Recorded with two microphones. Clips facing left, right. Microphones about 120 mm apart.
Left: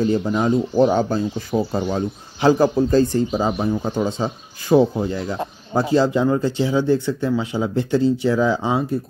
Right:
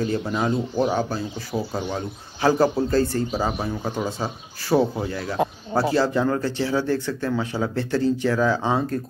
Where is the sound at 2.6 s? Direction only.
20° left (ahead or behind).